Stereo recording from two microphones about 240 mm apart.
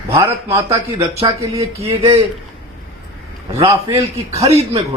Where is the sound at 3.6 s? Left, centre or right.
Centre.